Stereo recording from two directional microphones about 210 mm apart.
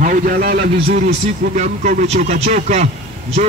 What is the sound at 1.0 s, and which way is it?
Speech, 35° right (ahead or behind).